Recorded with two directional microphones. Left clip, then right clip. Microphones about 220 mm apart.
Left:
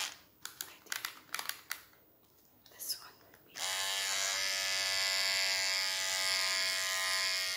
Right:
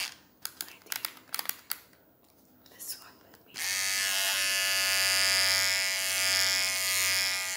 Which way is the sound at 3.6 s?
25° right (ahead or behind).